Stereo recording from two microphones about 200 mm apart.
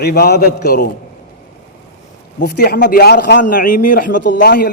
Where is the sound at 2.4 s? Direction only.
50° left (ahead or behind).